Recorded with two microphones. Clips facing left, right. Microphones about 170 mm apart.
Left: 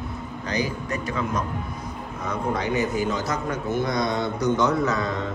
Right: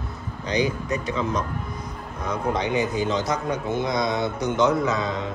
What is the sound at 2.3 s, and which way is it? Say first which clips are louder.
A man's voice: right 1 dB; 15° right (ahead or behind).